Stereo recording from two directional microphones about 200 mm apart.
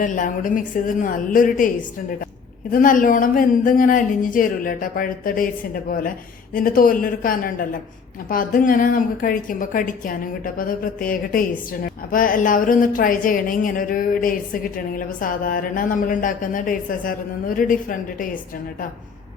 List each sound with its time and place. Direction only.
0.0 s a woman's voice: 40° left (ahead or behind)
2.7 s speech: 40° left (ahead or behind)